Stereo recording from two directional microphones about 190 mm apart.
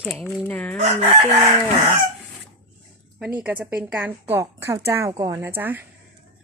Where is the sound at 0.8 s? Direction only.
35° right (ahead or behind).